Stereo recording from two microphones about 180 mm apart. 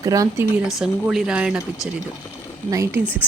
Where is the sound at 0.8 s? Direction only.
5° right (ahead or behind).